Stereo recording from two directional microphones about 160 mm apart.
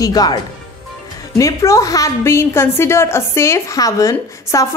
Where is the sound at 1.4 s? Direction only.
20° left (ahead or behind).